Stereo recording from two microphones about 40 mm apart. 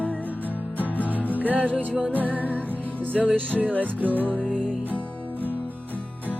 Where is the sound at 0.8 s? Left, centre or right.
Left.